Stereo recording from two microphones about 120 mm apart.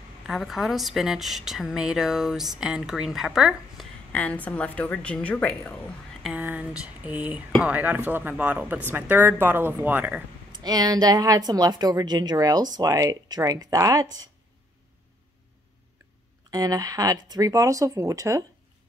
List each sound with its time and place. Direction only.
0.3 s a woman's voice: centre (ahead or behind)
4.1 s a woman's voice: 10° left (ahead or behind)
6.3 s a sound: 15° right (ahead or behind)
6.8 s speech: 10° right (ahead or behind)
10.5 s a woman's voice: 35° right (ahead or behind)
16.4 s speech: 30° right (ahead or behind)